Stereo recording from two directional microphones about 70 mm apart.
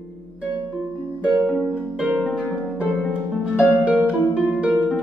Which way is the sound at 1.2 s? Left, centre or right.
Centre.